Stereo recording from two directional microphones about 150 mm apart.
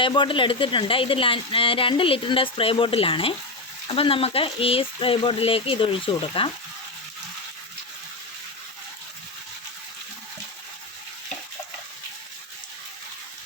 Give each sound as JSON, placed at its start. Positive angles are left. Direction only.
{"t": 0.0, "sound": "speech", "side_deg": 35}